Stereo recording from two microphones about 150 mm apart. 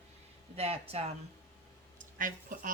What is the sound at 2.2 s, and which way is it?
Speech, 65° right (ahead or behind).